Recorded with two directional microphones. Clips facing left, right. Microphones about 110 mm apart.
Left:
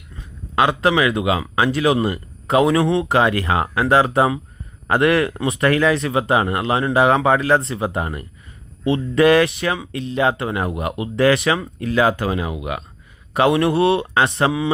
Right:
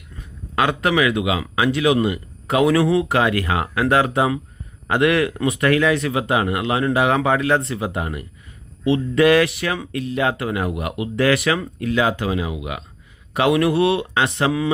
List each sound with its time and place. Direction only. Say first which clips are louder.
0.5 s speech: left 2 dB; 30° left (ahead or behind); by 12.8 s 45° left (ahead or behind)
13.3 s speech: left 1 dB; 35° left (ahead or behind)